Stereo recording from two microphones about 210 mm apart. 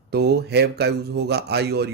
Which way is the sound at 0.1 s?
50° right (ahead or behind).